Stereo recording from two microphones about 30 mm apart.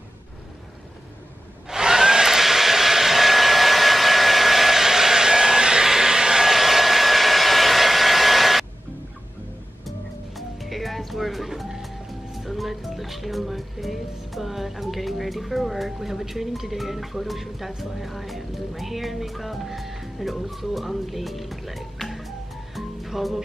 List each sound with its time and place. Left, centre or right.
1.7 s hair dryer: centre
5.9 s a sound: centre
6.5 s hair dryer: centre
9.8 s music: centre